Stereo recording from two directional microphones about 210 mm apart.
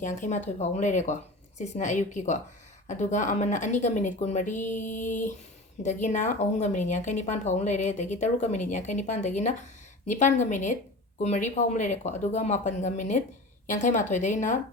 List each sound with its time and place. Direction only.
0.0 s a woman's voice: 35° left (ahead or behind)